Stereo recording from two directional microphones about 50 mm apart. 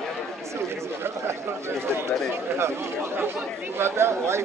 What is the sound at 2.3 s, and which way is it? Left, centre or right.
Speech, right.